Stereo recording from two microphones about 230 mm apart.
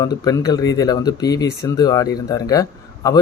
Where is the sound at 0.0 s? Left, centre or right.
Centre.